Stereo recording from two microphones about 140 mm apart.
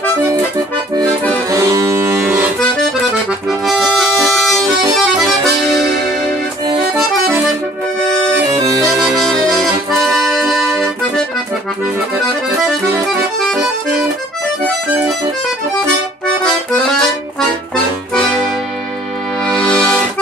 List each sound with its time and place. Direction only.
1.5 s music: 20° right (ahead or behind)
3.3 s accordion: centre (ahead or behind)
8.0 s accordion: 5° left (ahead or behind)
8.5 s music: 25° right (ahead or behind)
9.4 s accordion: centre (ahead or behind)
12.3 s accordion: 5° right (ahead or behind)
15.0 s accordion: centre (ahead or behind)
19.6 s accordion: 5° left (ahead or behind)